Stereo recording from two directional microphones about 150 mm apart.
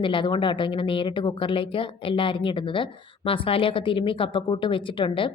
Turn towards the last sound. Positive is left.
turn(degrees=35)  # may be behind; listen again after turning